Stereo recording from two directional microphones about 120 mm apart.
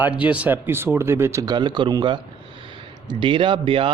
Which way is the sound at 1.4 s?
40° right (ahead or behind).